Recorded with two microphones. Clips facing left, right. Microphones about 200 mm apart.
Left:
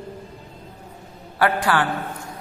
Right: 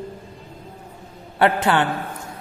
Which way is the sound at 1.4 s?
25° right (ahead or behind).